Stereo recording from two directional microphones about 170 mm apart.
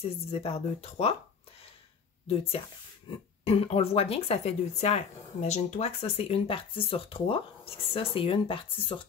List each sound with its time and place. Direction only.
0.0 s speech: 35° left (ahead or behind)
3.1 s speech: 35° left (ahead or behind)